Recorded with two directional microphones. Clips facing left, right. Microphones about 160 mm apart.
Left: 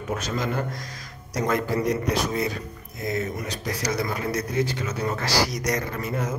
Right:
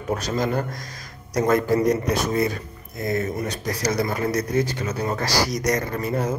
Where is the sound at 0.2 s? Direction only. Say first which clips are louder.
Right 4 dB; 35° right (ahead or behind).